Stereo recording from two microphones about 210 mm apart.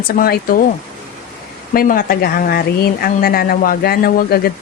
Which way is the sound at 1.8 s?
45° left (ahead or behind).